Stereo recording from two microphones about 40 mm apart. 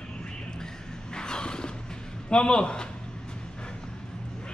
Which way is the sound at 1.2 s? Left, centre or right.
Centre.